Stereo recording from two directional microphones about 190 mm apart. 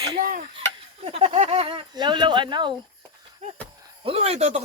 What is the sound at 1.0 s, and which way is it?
Speech, 30° right (ahead or behind).